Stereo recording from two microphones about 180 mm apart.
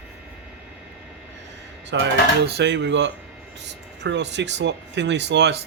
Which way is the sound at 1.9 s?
85° right.